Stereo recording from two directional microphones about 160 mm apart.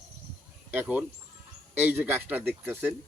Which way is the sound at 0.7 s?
10° right (ahead or behind).